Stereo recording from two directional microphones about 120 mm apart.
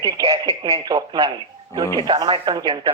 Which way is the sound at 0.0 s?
30° right (ahead or behind).